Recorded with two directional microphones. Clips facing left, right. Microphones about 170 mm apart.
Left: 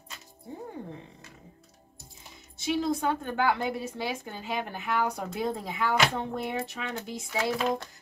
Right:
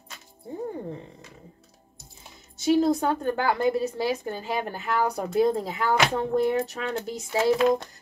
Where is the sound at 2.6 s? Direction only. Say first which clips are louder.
Right 6 dB; 40° right (ahead or behind).